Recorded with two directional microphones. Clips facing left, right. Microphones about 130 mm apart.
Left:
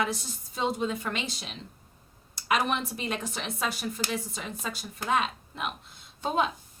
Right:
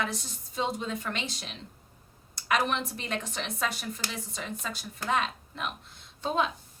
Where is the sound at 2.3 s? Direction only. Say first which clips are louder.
Left 1 dB; 10° left (ahead or behind).